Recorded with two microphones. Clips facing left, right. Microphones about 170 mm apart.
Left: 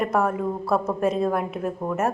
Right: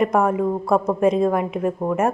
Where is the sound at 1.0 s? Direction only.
5° left (ahead or behind).